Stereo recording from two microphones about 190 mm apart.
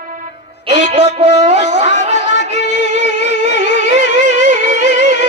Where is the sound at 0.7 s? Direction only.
30° right (ahead or behind).